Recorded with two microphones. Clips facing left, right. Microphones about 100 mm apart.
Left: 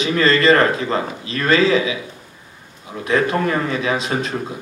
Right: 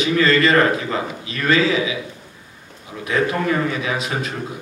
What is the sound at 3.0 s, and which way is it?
A man's voice, 30° left (ahead or behind).